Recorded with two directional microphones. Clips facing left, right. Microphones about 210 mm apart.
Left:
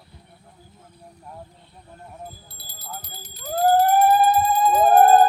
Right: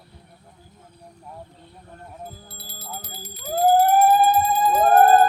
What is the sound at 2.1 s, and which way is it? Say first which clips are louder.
Alarm: right 1 dB; 5° right (ahead or behind).